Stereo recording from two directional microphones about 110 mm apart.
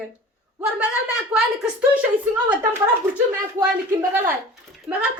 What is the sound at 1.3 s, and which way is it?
Speech, 5° right (ahead or behind).